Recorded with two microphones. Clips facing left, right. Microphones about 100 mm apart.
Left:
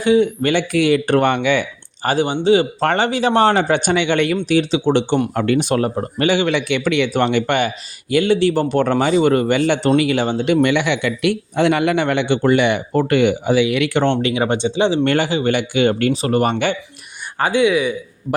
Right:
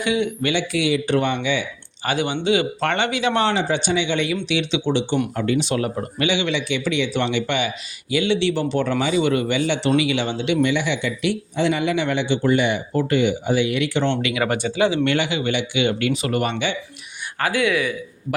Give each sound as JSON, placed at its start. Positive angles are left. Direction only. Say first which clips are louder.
{"t": 0.0, "sound": "speech", "louder": "left 7 dB", "side_deg": 35}
{"t": 0.5, "sound": "a man's voice", "louder": "left 6 dB", "side_deg": 50}
{"t": 2.0, "sound": "speech", "louder": "left 6 dB", "side_deg": 35}
{"t": 3.5, "sound": "a man's voice", "louder": "left 5 dB", "side_deg": 55}
{"t": 4.4, "sound": "a man's voice", "louder": "left 6 dB", "side_deg": 45}
{"t": 5.3, "sound": "a man's voice", "louder": "left 4 dB", "side_deg": 65}
{"t": 14.0, "sound": "speech", "louder": "left 4 dB", "side_deg": 40}
{"t": 15.0, "sound": "a man's voice", "louder": "left 4 dB", "side_deg": 45}
{"t": 17.4, "sound": "speech", "louder": "left 5 dB", "side_deg": 20}